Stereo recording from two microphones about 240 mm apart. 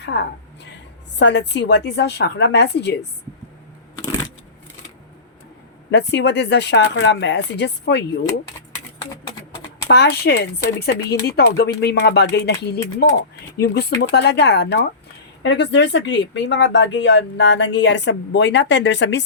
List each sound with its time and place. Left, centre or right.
0.0 s a woman's voice: left
5.9 s speech: left
9.9 s speech: left